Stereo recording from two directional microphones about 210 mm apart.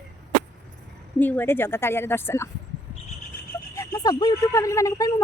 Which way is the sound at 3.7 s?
15° left (ahead or behind).